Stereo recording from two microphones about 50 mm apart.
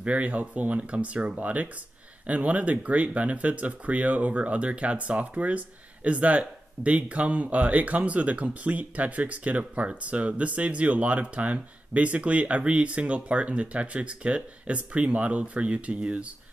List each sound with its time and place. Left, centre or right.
0.0 s speech: right